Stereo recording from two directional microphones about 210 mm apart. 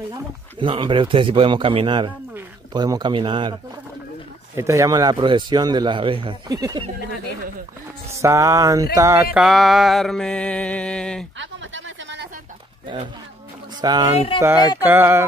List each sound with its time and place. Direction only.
0.1 s a man's voice: 25° right (ahead or behind)
4.6 s a man's voice: 15° right (ahead or behind)
8.2 s speech: 15° right (ahead or behind)
9.3 s music: centre (ahead or behind)
11.3 s a sound: 60° right (ahead or behind)
13.7 s speech: 20° right (ahead or behind)
14.3 s speech: 25° left (ahead or behind)
14.8 s speech: 10° right (ahead or behind)